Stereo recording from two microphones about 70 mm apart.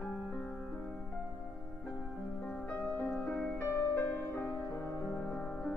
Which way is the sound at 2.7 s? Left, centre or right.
Left.